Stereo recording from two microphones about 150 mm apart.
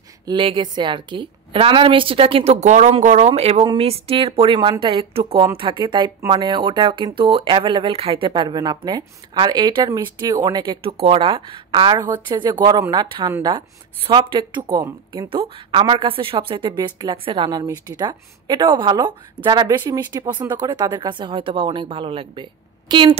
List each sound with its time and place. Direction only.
0.2 s speech: 35° right (ahead or behind)
13.6 s speech: 35° right (ahead or behind)